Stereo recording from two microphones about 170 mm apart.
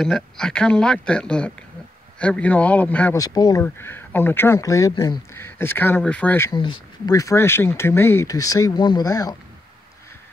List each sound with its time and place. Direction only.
0.0 s speech: 5° left (ahead or behind)
3.2 s speech: 20° left (ahead or behind)
6.5 s speech: 25° left (ahead or behind)